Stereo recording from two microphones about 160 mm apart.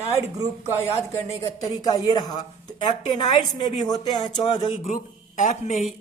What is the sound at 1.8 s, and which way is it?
A woman's voice, 25° left (ahead or behind).